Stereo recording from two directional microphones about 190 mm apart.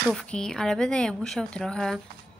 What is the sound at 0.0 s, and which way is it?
Speech, centre (ahead or behind).